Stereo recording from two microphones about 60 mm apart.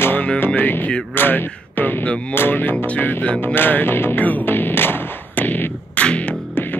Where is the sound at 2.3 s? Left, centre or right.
Left.